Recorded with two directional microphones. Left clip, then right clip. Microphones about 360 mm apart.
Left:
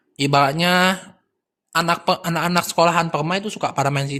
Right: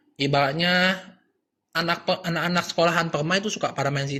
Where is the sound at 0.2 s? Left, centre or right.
Left.